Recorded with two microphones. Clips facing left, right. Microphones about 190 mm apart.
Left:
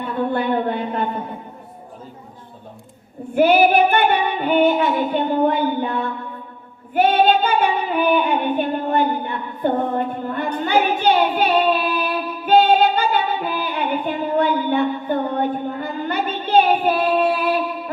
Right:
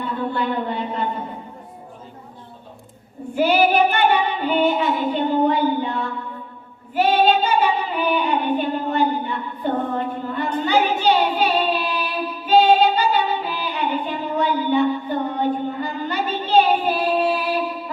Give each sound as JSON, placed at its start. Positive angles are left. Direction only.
{"t": 0.3, "sound": "female singing", "side_deg": 55}
{"t": 3.3, "sound": "child singing", "side_deg": 55}
{"t": 4.6, "sound": "music", "side_deg": 0}
{"t": 5.1, "sound": "female singing", "side_deg": 55}
{"t": 9.6, "sound": "child singing", "side_deg": 55}
{"t": 14.3, "sound": "a sound", "side_deg": 55}